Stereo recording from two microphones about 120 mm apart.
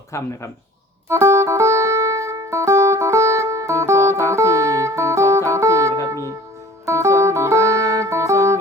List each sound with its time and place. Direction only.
0.1 s speech: 25° left (ahead or behind)
1.0 s music: 25° right (ahead or behind)